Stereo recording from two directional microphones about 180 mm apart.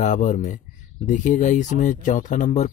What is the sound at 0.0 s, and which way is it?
Speech, 45° left (ahead or behind).